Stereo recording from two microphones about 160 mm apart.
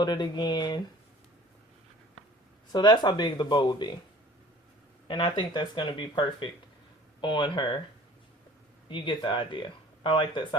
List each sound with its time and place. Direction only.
0.0 s speech: 25° left (ahead or behind)
2.7 s speech: 30° left (ahead or behind)
5.0 s speech: 30° left (ahead or behind)
8.9 s speech: 30° left (ahead or behind)